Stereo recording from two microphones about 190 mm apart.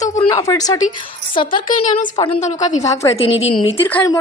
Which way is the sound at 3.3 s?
30° left (ahead or behind).